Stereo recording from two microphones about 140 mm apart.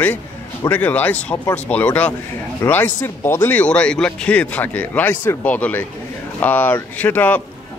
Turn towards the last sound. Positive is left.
turn(degrees=10)  # may be behind; listen again after turning